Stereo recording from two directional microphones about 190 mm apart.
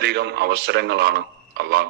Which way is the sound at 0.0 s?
60° right (ahead or behind).